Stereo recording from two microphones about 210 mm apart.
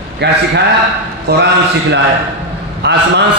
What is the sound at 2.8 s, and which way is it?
Speech, 55° right (ahead or behind).